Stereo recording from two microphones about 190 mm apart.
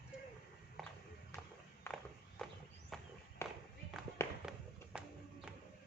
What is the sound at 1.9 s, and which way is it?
Walk, 15° left (ahead or behind).